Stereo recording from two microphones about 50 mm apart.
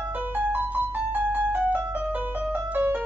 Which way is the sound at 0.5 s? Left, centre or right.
Right.